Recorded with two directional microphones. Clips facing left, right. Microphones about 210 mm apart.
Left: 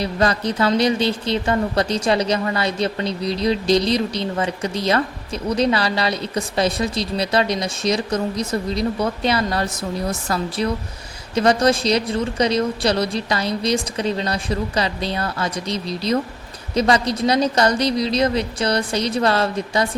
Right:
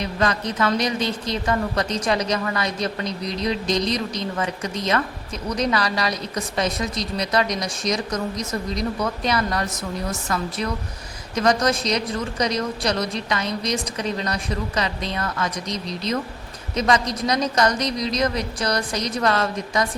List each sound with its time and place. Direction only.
0.0 s a woman's voice: 35° left (ahead or behind)